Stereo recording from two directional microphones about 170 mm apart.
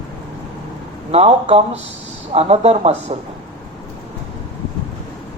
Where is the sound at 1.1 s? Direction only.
35° right (ahead or behind).